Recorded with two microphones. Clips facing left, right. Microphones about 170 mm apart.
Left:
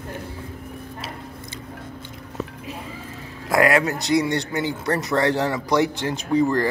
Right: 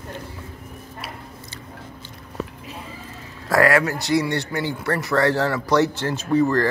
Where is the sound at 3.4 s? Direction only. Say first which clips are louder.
Right 1 dB; 20° left (ahead or behind).